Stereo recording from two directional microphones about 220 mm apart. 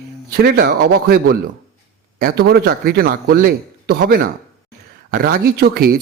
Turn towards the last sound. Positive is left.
turn(degrees=-45)  # may be behind; listen again after turning